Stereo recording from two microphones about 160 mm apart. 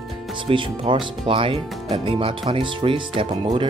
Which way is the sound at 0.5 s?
30° right (ahead or behind).